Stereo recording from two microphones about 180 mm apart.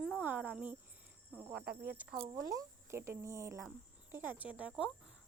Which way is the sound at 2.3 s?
20° right (ahead or behind).